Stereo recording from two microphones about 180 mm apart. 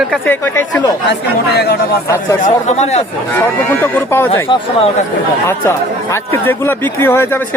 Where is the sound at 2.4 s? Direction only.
40° left (ahead or behind).